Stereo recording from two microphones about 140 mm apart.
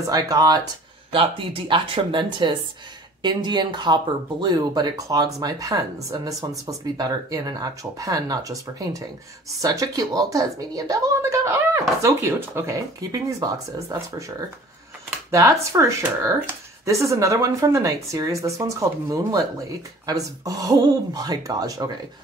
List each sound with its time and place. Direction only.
0.0 s speech: 25° right (ahead or behind)
1.1 s speech: 40° right (ahead or behind)